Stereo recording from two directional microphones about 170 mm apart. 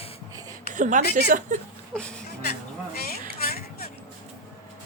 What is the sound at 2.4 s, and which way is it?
Music, 65° left (ahead or behind).